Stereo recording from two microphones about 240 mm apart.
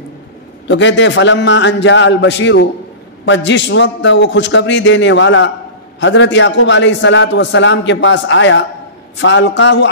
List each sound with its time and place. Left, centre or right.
0.7 s a man's voice: left